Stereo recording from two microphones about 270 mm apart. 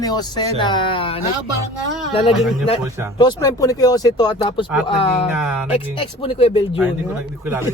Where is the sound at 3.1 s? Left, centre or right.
Centre.